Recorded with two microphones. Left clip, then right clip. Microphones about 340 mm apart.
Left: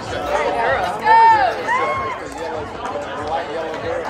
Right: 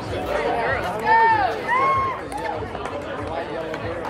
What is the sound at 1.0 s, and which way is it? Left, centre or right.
Run, left.